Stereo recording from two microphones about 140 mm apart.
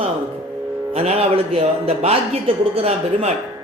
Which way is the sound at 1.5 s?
45° right (ahead or behind).